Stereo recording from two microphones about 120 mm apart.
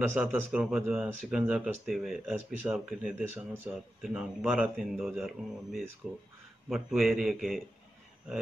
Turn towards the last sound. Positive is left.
turn(degrees=0)  # may be behind; listen again after turning